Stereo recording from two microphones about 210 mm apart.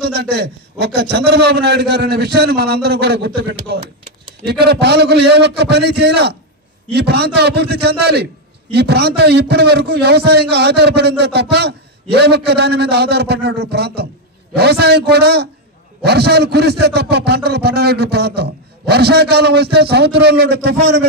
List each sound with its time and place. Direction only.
0.1 s a man's voice: 50° right (ahead or behind)